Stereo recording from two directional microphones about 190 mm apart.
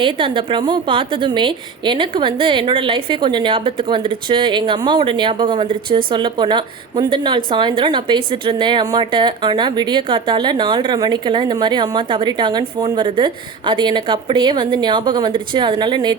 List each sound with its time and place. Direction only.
0.0 s a woman's voice: 25° right (ahead or behind)